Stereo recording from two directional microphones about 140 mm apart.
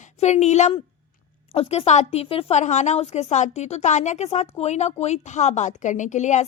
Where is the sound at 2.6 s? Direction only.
55° left (ahead or behind).